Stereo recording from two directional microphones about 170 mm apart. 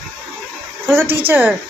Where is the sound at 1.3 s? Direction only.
10° right (ahead or behind).